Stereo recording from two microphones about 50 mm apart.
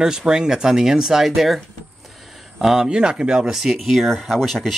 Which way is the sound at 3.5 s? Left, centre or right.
Centre.